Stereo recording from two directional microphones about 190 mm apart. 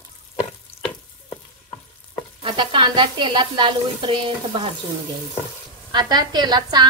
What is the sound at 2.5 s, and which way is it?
A woman's voice, 25° right (ahead or behind).